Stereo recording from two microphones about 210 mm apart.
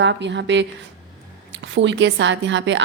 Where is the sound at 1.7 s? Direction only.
60° right (ahead or behind).